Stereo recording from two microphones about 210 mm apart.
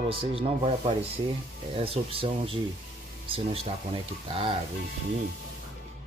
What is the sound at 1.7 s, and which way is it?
Speech, 25° right (ahead or behind).